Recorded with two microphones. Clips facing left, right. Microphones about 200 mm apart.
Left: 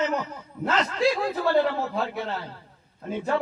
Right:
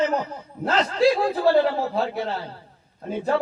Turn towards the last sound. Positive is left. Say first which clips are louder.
# right 3 dB
turn(degrees=-35)  # may be behind; listen again after turning